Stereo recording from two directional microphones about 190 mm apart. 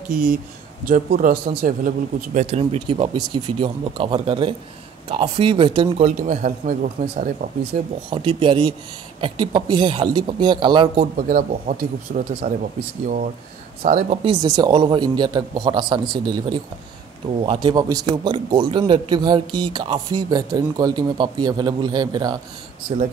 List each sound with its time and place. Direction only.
0.1 s a man's voice: 50° right (ahead or behind); by 6.0 s 25° right (ahead or behind)
6.0 s a man's voice: 40° right (ahead or behind)
8.1 s a man's voice: 25° right (ahead or behind)
11.1 s a man's voice: 45° right (ahead or behind)
13.8 s a man's voice: 45° right (ahead or behind)
14.2 s a man's voice: 20° right (ahead or behind)